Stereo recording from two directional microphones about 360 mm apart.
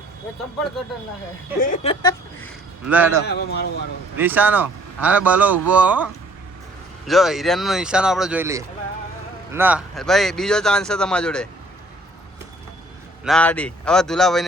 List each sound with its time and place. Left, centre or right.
1.6 s speech: centre
2.8 s speech: centre
3.2 s a man's voice: left
4.2 s speech: centre
7.1 s speech: centre
13.2 s speech: centre